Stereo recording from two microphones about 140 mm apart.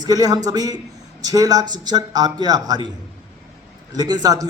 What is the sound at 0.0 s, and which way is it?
A man's voice, 30° right (ahead or behind).